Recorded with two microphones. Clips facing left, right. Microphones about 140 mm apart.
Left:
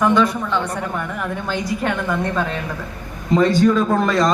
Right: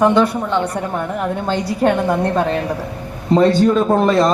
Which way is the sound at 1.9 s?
35° right (ahead or behind).